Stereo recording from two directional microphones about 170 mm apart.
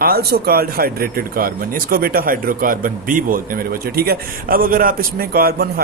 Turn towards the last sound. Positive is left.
turn(degrees=-65)  # may be behind; listen again after turning